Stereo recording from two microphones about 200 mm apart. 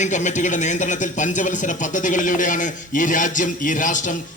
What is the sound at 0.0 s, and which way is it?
Speech, 35° left (ahead or behind).